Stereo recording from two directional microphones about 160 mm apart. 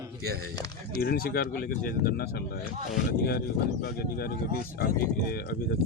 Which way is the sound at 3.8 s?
70° left (ahead or behind).